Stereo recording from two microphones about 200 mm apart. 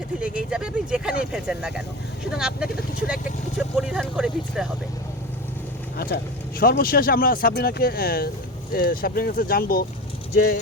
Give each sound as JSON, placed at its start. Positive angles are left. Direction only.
{"t": 0.2, "sound": "speech", "side_deg": -5}
{"t": 3.8, "sound": "vehicle", "side_deg": -5}
{"t": 6.0, "sound": "speech", "side_deg": 45}